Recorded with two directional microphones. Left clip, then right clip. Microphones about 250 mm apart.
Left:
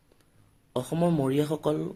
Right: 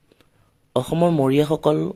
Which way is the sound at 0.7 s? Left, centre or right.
Right.